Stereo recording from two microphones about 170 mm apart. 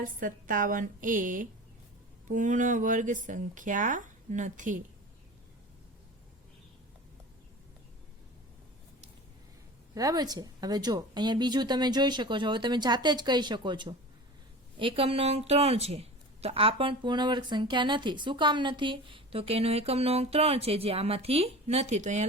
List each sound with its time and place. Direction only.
0.0 s speech: 55° right (ahead or behind)
9.9 s a woman's voice: 20° right (ahead or behind); by 22.3 s 45° right (ahead or behind)